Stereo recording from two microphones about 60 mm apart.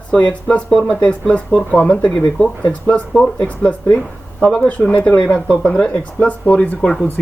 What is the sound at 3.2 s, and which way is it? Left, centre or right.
Speech, left.